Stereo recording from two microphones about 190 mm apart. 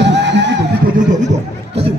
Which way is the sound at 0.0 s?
65° right (ahead or behind).